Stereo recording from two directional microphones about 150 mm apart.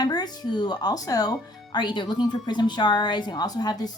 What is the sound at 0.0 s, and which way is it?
A woman's voice, 25° left (ahead or behind).